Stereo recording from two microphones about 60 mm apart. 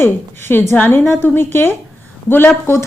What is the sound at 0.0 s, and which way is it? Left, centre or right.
A woman's voice, left.